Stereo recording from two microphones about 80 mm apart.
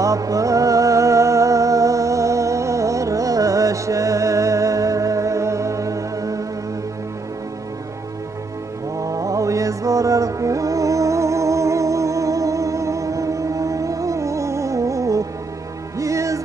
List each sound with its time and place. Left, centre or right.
0.0 s music: right
8.9 s music: right